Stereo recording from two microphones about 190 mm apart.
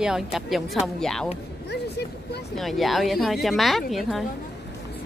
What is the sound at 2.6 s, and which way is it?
A woman's voice, centre (ahead or behind).